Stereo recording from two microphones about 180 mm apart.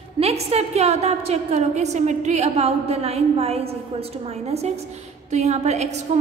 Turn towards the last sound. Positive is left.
turn(degrees=-40)  # may be behind; listen again after turning